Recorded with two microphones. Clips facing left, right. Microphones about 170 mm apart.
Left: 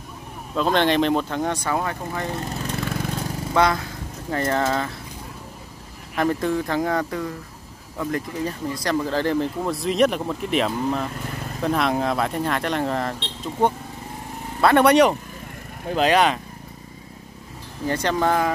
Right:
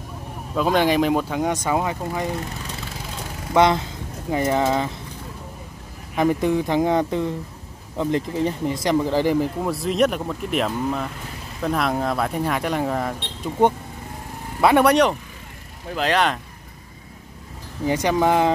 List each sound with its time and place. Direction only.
0.6 s speech: 10° right (ahead or behind)
2.8 s vehicle: 60° left (ahead or behind)
3.5 s speech: 20° right (ahead or behind)
6.1 s speech: 15° right (ahead or behind)
14.6 s speech: 10° right (ahead or behind)
14.9 s speech: 5° left (ahead or behind)
17.8 s speech: 15° right (ahead or behind)